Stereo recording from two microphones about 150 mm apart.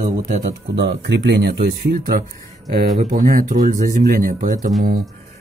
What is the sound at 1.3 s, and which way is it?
Speech, 90° right.